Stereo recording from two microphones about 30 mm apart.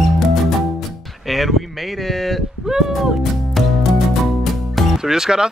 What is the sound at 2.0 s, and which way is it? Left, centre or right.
Speech, centre.